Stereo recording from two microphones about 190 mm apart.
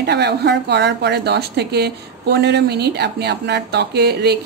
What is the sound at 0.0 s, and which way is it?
Speech, 60° right (ahead or behind).